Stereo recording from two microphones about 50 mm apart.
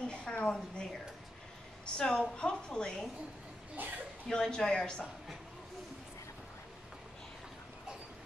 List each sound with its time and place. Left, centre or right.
0.0 s a sound: centre
2.0 s a woman's voice: centre
3.7 s speech: right
4.3 s a woman's voice: centre